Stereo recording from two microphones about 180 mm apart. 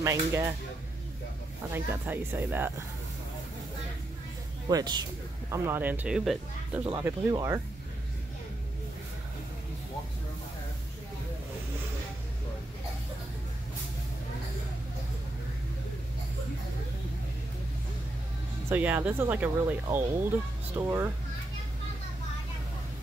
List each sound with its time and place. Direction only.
0.0 s speech: 15° right (ahead or behind)
1.7 s speech: 10° right (ahead or behind)
4.6 s speech: 25° right (ahead or behind)
5.5 s speech: 10° right (ahead or behind)
7.1 s speech: 20° right (ahead or behind)
18.7 s speech: 10° right (ahead or behind)